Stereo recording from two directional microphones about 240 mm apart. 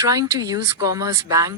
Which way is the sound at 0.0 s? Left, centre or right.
Centre.